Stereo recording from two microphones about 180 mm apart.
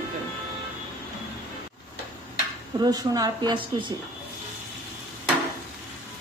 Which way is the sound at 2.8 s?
20° right (ahead or behind).